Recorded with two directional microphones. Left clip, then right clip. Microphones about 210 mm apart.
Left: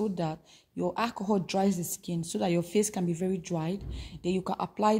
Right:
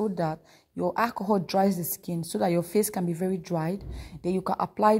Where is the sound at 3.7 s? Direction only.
60° right (ahead or behind).